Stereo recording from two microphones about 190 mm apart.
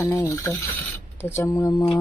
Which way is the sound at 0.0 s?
15° left (ahead or behind).